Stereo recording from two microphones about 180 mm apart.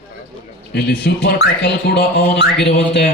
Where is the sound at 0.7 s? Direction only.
65° left (ahead or behind).